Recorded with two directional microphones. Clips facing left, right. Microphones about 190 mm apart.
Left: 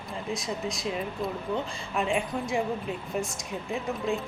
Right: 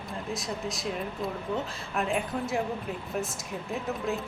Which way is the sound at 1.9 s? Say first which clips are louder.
Left 1 dB; centre (ahead or behind).